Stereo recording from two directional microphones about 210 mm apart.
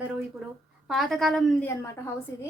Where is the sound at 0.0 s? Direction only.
5° right (ahead or behind).